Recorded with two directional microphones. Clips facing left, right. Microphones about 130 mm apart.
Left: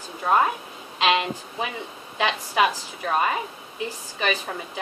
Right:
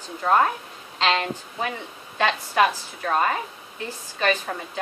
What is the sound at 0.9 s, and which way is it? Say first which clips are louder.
A woman's voice: left 1 dB; 10° left (ahead or behind).